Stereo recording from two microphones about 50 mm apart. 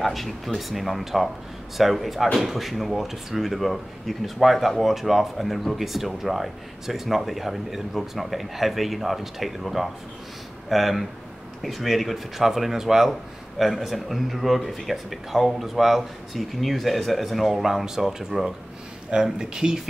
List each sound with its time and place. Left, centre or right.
0.0 s speech: centre